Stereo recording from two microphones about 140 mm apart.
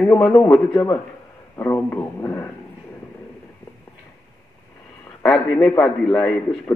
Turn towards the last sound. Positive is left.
turn(degrees=5)  # may be behind; listen again after turning